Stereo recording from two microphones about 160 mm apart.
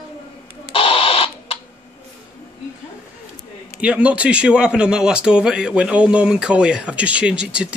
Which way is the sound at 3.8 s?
10° right (ahead or behind).